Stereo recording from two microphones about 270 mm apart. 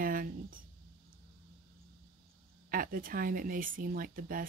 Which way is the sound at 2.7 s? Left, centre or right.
Right.